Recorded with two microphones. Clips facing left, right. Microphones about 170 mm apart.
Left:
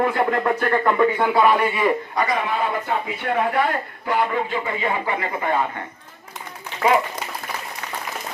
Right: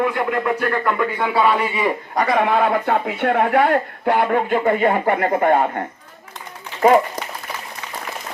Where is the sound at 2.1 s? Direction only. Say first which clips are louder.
Right 5 dB; 60° right (ahead or behind).